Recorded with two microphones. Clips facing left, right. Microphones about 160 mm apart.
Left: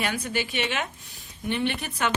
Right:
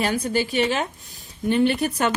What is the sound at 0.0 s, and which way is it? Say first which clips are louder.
Speech: right 6 dB; 35° right (ahead or behind).